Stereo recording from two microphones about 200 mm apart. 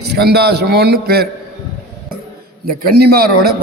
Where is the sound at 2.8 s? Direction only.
50° right (ahead or behind).